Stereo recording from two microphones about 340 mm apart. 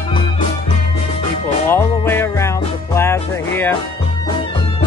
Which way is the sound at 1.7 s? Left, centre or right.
Centre.